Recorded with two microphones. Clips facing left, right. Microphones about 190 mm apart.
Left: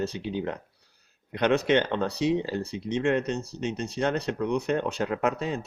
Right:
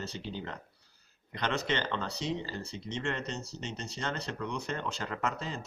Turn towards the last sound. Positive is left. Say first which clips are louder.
# left 8 dB
turn(degrees=60)  # may be behind; listen again after turning